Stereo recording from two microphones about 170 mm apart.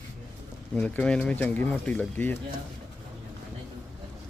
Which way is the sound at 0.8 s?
10° left (ahead or behind).